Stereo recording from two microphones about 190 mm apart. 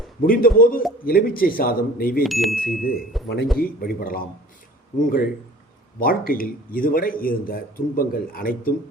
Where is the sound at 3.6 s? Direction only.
50° left (ahead or behind).